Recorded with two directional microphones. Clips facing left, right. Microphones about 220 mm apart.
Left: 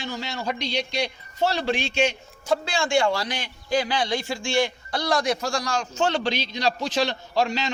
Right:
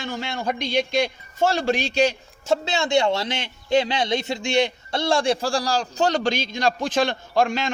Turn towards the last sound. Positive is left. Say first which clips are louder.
# right 3 dB
turn(degrees=-50)  # may be behind; listen again after turning